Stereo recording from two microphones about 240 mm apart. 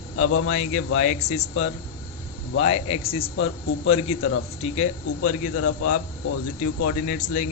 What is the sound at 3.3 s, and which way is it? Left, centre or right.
Speech, left.